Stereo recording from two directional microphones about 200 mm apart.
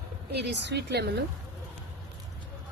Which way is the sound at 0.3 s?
55° right (ahead or behind).